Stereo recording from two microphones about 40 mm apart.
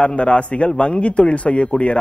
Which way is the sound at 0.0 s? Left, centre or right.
Left.